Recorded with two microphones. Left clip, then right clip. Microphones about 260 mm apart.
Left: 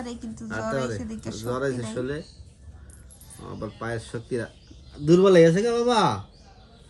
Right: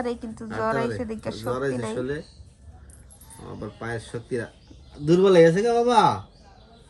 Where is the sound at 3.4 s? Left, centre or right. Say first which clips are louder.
Left 1 dB; centre.